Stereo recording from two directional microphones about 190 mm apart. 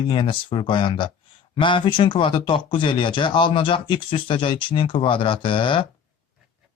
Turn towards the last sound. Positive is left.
turn(degrees=25)  # may be behind; listen again after turning